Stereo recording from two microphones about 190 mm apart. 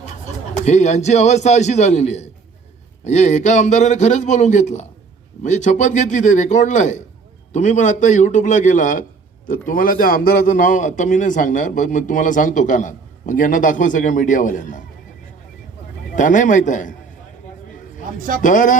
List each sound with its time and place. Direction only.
0.5 s a man's voice: 35° left (ahead or behind)
16.1 s a man's voice: 40° left (ahead or behind)
18.4 s a man's voice: 45° left (ahead or behind)